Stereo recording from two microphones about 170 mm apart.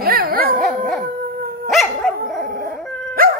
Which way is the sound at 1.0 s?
60° right (ahead or behind).